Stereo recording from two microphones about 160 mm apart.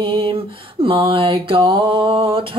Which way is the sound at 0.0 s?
35° right (ahead or behind).